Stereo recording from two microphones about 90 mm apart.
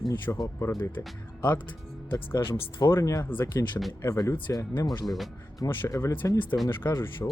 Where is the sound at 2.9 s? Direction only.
40° left (ahead or behind).